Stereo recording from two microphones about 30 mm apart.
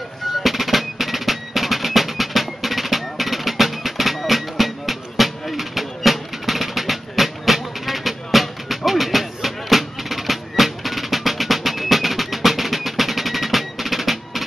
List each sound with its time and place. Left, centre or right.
0.4 s music: centre